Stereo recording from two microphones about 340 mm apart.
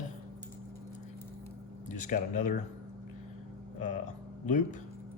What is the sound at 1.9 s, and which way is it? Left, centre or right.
Speech, left.